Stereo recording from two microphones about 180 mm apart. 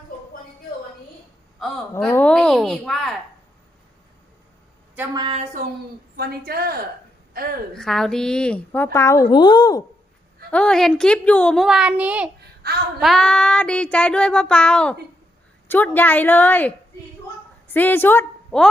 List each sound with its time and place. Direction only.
1.5 s a sound: centre (ahead or behind)
5.1 s a woman's voice: 25° right (ahead or behind)
6.1 s a woman's voice: 55° right (ahead or behind)
7.7 s a woman's voice: 5° left (ahead or behind); by 9.8 s 25° left (ahead or behind)
10.5 s child singing: 5° left (ahead or behind)
12.6 s a sound: 60° right (ahead or behind)
13.0 s child singing: centre (ahead or behind)
15.6 s a woman's voice: 10° left (ahead or behind)
17.7 s a woman's voice: 10° left (ahead or behind)